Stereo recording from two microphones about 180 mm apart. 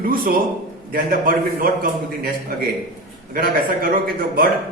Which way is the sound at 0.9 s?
50° right (ahead or behind).